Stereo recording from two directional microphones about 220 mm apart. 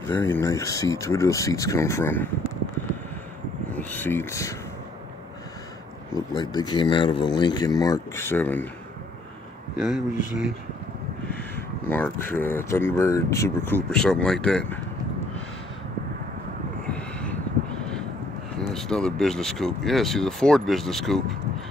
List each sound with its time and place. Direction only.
0.0 s speech: 10° left (ahead or behind)
3.7 s speech: 10° left (ahead or behind)
6.1 s speech: 20° left (ahead or behind)
9.8 s speech: centre (ahead or behind)
16.9 s vehicle: 5° left (ahead or behind)
18.7 s speech: centre (ahead or behind)